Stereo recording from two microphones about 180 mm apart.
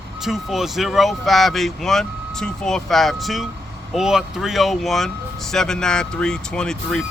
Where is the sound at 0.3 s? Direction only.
Centre (ahead or behind).